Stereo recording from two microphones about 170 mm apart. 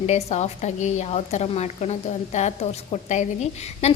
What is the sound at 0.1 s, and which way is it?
A woman's voice, 40° left (ahead or behind).